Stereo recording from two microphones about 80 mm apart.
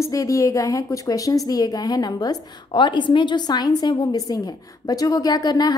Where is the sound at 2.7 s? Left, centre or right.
Left.